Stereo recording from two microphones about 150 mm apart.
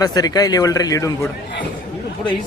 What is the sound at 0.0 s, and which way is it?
Speech, 25° left (ahead or behind).